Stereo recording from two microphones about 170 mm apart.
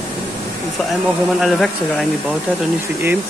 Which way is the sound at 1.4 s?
Centre (ahead or behind).